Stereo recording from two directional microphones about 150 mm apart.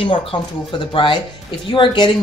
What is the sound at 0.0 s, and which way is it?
A woman's voice, 35° left (ahead or behind).